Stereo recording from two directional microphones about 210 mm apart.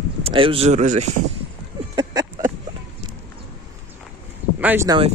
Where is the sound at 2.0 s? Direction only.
20° right (ahead or behind).